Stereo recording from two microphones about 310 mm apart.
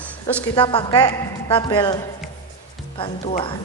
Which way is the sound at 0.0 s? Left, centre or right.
Centre.